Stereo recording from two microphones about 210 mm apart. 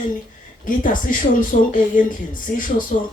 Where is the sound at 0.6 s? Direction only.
40° left (ahead or behind).